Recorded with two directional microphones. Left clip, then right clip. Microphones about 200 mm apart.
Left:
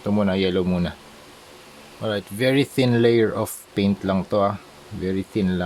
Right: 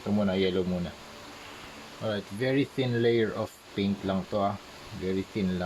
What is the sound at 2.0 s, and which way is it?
Speech, 35° left (ahead or behind).